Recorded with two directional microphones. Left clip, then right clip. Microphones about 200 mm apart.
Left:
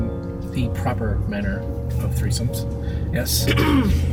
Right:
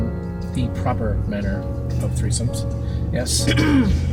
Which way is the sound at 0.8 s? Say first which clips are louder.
Right 4 dB; 25° left (ahead or behind).